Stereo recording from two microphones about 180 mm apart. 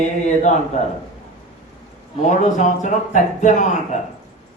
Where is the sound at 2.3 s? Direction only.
45° left (ahead or behind).